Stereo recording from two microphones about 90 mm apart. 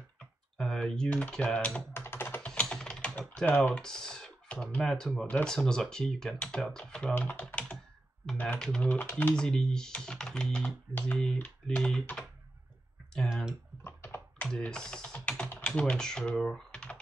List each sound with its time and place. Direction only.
0.6 s speech: 5° left (ahead or behind)
2.0 s computer keyboard: 25° left (ahead or behind)
3.2 s speech: 15° left (ahead or behind)
13.3 s speech: 5° right (ahead or behind)
13.8 s typing: 25° left (ahead or behind)
14.4 s speech: 10° left (ahead or behind)